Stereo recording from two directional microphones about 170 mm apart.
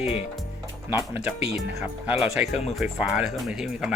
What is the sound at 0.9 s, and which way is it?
Speech, 10° right (ahead or behind).